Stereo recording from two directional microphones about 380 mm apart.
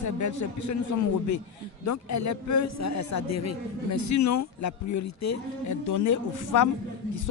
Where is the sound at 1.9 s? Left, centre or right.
Left.